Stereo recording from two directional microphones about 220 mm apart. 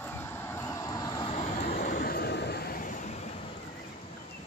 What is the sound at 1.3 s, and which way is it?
Vehicle, 35° left (ahead or behind).